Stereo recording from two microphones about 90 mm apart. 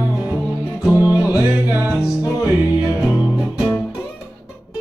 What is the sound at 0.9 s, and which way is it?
Music, 35° left (ahead or behind).